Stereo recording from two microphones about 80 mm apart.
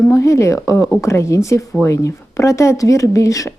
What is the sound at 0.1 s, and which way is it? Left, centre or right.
Speech, left.